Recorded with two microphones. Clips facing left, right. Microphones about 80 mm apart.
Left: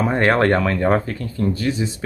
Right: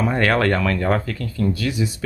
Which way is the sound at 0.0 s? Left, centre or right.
Left.